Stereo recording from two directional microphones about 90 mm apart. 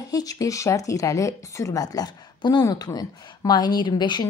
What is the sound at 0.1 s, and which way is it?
A woman's voice, 40° left (ahead or behind).